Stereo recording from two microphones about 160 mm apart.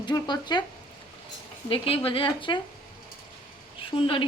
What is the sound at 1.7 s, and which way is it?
Speech, 35° left (ahead or behind).